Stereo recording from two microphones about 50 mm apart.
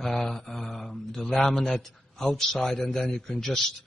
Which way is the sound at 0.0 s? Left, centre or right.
Centre.